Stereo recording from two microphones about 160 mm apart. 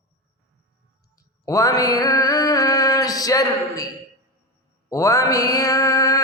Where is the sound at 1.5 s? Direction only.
20° left (ahead or behind).